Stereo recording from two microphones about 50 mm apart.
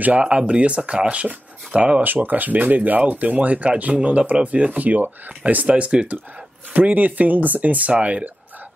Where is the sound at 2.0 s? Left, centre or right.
Right.